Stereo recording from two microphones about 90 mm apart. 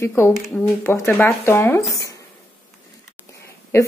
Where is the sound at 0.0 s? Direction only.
30° left (ahead or behind).